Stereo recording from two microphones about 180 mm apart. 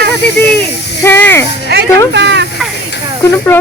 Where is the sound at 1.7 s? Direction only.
65° right (ahead or behind).